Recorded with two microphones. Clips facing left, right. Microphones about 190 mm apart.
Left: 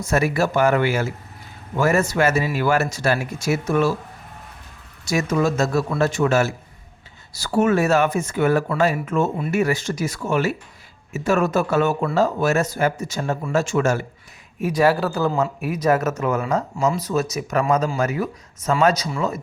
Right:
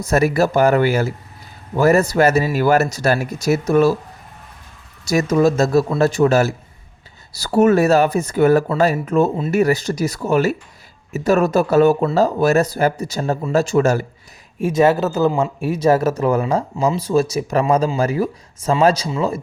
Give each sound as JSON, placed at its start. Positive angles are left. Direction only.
{"t": 0.0, "sound": "speech", "side_deg": -40}
{"t": 5.0, "sound": "speech", "side_deg": -40}
{"t": 14.6, "sound": "speech", "side_deg": -25}